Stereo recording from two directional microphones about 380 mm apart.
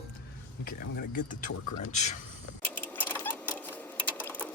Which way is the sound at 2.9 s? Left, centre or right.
Centre.